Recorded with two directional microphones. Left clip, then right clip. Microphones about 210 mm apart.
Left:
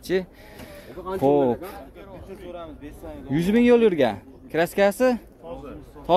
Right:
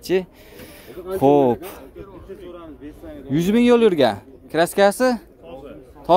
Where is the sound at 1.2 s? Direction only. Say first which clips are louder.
Right 5 dB; 30° right (ahead or behind).